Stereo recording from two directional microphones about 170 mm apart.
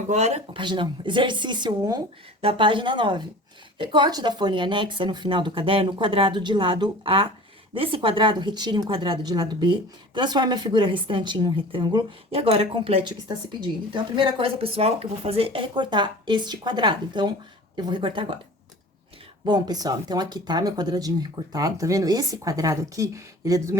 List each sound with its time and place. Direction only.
0.1 s speech: 40° right (ahead or behind)
0.6 s speech: 25° right (ahead or behind)
19.5 s speech: 25° right (ahead or behind)